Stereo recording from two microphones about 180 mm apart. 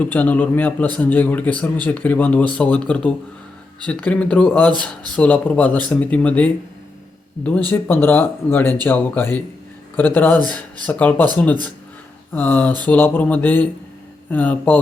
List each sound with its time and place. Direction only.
0.1 s a man's voice: 10° left (ahead or behind)
12.3 s a man's voice: 10° left (ahead or behind)